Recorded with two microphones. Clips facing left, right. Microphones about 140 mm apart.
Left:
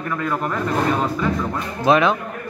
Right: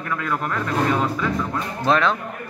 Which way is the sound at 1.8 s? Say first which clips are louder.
Left 4 dB; 10° left (ahead or behind).